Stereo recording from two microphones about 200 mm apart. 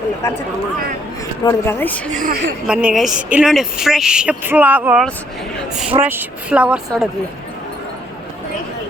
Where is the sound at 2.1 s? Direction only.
40° right (ahead or behind).